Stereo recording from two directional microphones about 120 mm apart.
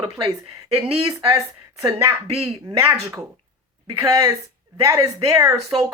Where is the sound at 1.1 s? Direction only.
30° right (ahead or behind).